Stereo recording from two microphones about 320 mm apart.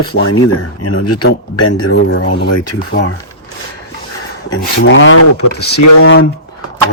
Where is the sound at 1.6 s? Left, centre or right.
Left.